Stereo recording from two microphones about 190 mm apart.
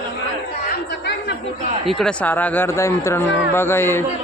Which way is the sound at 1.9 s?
5° left (ahead or behind).